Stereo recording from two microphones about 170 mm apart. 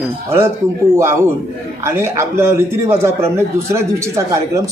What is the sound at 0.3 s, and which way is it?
Speech, 15° right (ahead or behind).